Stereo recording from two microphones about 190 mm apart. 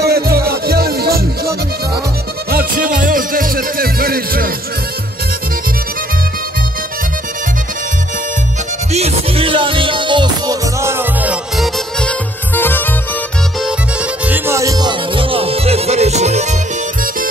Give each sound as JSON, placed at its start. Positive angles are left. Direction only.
{"t": 0.0, "sound": "music", "side_deg": -55}
{"t": 2.5, "sound": "music", "side_deg": -50}
{"t": 8.9, "sound": "music", "side_deg": -30}
{"t": 11.5, "sound": "music", "side_deg": 0}
{"t": 14.2, "sound": "music", "side_deg": -10}